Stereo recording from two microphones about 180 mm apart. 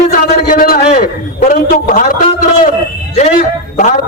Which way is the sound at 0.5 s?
55° left (ahead or behind).